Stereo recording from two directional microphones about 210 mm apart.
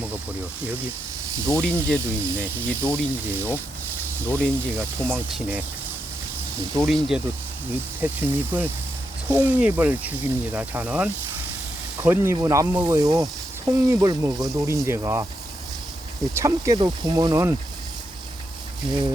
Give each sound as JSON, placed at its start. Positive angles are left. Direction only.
{"t": 1.6, "sound": "speech", "side_deg": 5}
{"t": 2.0, "sound": "speech", "side_deg": -15}
{"t": 2.4, "sound": "speech", "side_deg": 5}
{"t": 5.1, "sound": "speech", "side_deg": -10}
{"t": 6.7, "sound": "speech", "side_deg": 0}
{"t": 8.0, "sound": "speech", "side_deg": -10}
{"t": 16.3, "sound": "speech", "side_deg": -15}